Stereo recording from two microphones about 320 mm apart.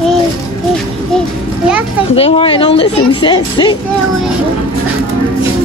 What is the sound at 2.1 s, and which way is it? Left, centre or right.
Speech, centre.